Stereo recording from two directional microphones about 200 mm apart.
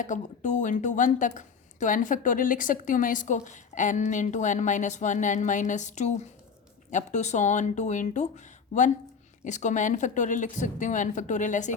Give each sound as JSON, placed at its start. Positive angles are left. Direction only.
{"t": 0.0, "sound": "a woman's voice", "side_deg": 40}